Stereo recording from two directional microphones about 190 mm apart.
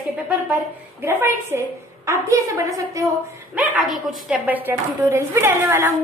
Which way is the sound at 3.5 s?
5° right (ahead or behind).